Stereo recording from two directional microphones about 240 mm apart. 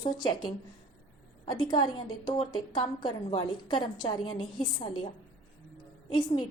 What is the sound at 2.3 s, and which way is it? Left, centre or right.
A woman's voice, left.